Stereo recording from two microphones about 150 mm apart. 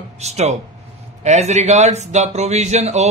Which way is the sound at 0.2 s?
45° right (ahead or behind).